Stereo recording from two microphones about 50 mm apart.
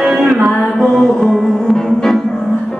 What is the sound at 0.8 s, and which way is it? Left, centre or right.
Mantra, centre.